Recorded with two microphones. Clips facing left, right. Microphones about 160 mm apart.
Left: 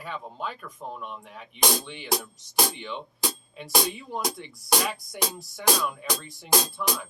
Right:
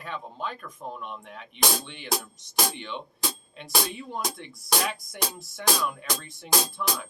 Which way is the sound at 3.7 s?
10° left (ahead or behind).